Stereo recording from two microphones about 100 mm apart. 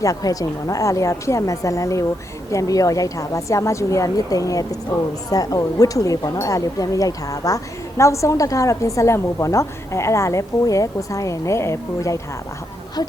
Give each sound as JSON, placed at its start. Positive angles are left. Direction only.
{"t": 0.0, "sound": "speech", "side_deg": 35}
{"t": 13.0, "sound": "speech", "side_deg": 40}